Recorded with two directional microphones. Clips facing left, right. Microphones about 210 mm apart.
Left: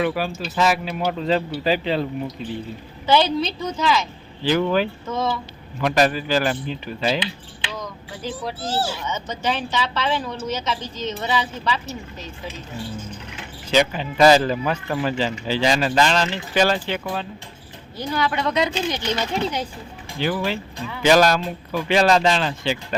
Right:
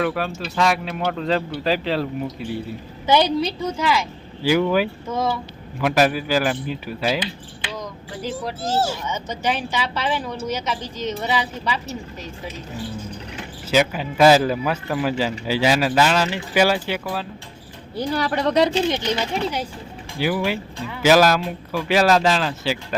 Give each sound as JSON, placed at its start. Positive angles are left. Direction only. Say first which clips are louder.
{"t": 0.0, "sound": "speech", "louder": "even", "side_deg": 0}
{"t": 3.1, "sound": "a man's voice", "louder": "right 1 dB", "side_deg": -15}
{"t": 8.6, "sound": "speech", "louder": "right 3 dB", "side_deg": -45}
{"t": 9.0, "sound": "a man's voice", "louder": "right 1 dB", "side_deg": -10}
{"t": 13.7, "sound": "a man's voice", "louder": "even", "side_deg": -5}
{"t": 18.1, "sound": "a woman's voice", "louder": "right 2 dB", "side_deg": -35}
{"t": 20.1, "sound": "speech", "louder": "right 1 dB", "side_deg": -10}